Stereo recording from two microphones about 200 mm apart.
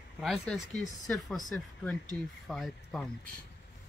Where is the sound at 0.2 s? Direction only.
Centre (ahead or behind).